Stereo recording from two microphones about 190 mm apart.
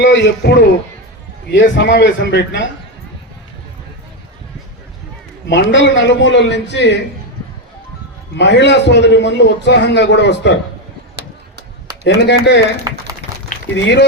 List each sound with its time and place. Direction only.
0.0 s a man's voice: 70° left (ahead or behind)
5.5 s a man's voice: 70° left (ahead or behind)
8.4 s a man's voice: 65° left (ahead or behind)
12.0 s a man's voice: 65° left (ahead or behind)
13.7 s a man's voice: 70° left (ahead or behind)